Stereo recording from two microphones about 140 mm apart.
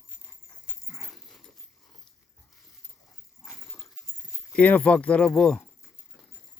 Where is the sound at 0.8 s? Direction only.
Centre (ahead or behind).